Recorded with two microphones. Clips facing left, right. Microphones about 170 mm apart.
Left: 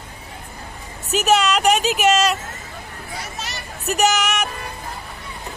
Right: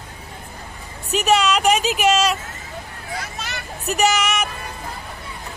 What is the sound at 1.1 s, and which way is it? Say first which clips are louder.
Speech: even; centre (ahead or behind).